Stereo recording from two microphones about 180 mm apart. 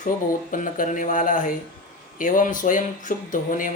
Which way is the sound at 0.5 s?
45° left (ahead or behind).